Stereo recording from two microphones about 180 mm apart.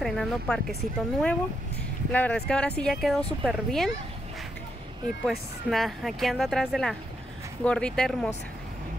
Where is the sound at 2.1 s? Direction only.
5° left (ahead or behind).